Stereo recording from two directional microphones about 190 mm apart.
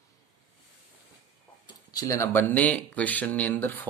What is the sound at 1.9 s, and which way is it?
Speech, 20° left (ahead or behind).